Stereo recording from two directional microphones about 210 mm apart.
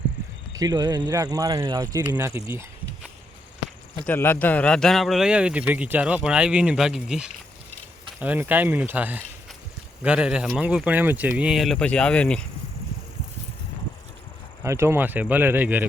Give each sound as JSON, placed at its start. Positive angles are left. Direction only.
{"t": 0.5, "sound": "speech", "side_deg": -20}
{"t": 4.0, "sound": "a man's voice", "side_deg": 10}
{"t": 14.6, "sound": "speech", "side_deg": -15}